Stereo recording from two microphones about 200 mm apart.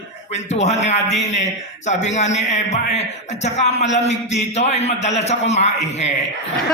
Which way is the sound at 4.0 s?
35° left (ahead or behind).